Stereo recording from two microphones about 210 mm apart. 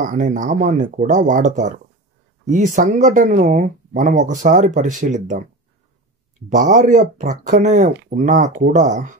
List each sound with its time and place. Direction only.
0.0 s speech: 40° right (ahead or behind)
6.5 s speech: 40° right (ahead or behind)